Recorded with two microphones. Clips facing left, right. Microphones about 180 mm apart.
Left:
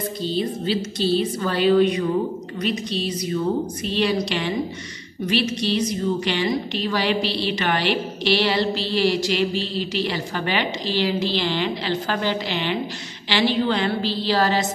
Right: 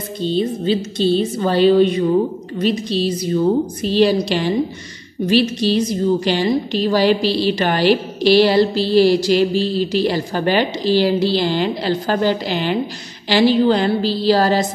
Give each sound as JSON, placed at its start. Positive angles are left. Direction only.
{"t": 1.4, "sound": "a woman's voice", "side_deg": -30}